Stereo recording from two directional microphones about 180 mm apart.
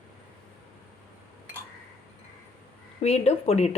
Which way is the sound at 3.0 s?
35° left (ahead or behind).